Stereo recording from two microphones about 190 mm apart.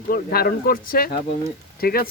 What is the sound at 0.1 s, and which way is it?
Speech, 55° left (ahead or behind).